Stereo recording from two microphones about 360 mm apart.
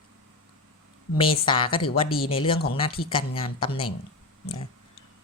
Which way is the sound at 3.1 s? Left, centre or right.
Centre.